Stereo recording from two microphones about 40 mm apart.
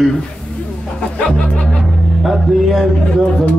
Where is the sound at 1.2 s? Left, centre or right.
Left.